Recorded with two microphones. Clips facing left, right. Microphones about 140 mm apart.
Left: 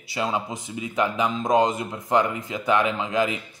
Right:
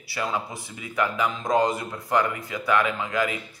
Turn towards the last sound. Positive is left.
turn(degrees=20)  # may be behind; listen again after turning